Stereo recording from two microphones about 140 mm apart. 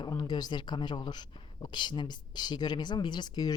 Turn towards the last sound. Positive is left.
turn(degrees=30)  # may be behind; listen again after turning